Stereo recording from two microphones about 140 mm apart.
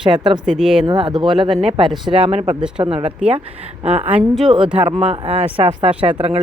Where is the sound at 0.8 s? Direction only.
30° right (ahead or behind).